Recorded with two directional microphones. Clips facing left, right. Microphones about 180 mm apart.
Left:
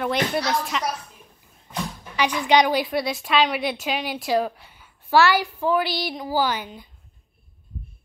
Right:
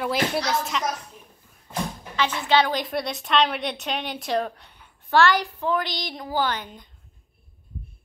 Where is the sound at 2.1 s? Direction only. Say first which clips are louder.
Left 2 dB; 15° left (ahead or behind).